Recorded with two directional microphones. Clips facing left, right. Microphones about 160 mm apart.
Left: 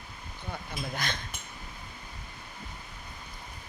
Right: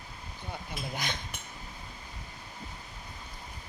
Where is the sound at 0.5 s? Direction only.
15° right (ahead or behind).